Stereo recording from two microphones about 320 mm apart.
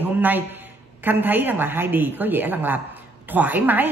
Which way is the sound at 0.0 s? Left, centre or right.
Centre.